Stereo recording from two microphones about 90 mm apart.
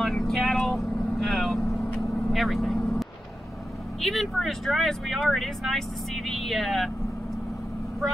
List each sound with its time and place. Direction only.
0.0 s vehicle: 5° left (ahead or behind)
4.0 s speech: centre (ahead or behind)